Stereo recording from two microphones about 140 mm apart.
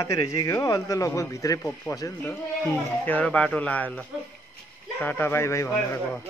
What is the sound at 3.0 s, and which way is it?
Speech, 10° left (ahead or behind).